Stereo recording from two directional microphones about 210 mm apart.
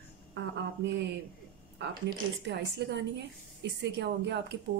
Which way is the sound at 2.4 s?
55° right (ahead or behind).